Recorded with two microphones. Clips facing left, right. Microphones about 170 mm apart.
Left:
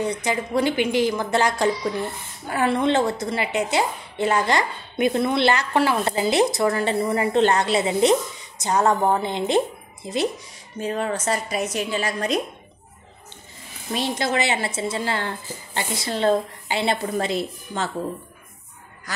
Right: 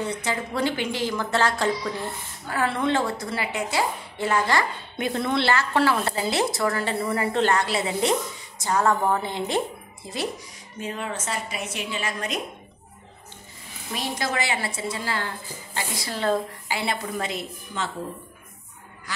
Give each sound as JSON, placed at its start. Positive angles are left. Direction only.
{"t": 0.0, "sound": "a woman's voice", "side_deg": 15}
{"t": 10.8, "sound": "a woman's voice", "side_deg": 40}
{"t": 13.9, "sound": "a woman's voice", "side_deg": 25}
{"t": 19.1, "sound": "a man's voice", "side_deg": 45}